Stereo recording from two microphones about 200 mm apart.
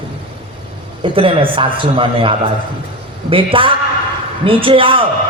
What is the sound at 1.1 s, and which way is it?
A man's voice, 25° right (ahead or behind).